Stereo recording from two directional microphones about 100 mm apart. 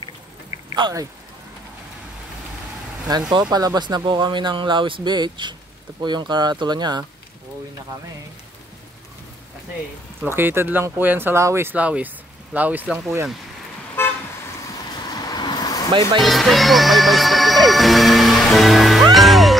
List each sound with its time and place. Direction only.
3.3 s speech: 45° right (ahead or behind)
10.2 s speech: 20° right (ahead or behind)
13.0 s speech: 25° right (ahead or behind)
14.0 s car: 20° left (ahead or behind)
14.9 s vehicle: 45° left (ahead or behind)
16.2 s music: centre (ahead or behind)